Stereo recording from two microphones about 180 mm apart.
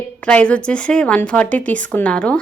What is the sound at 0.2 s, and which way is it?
A woman's voice, 5° left (ahead or behind).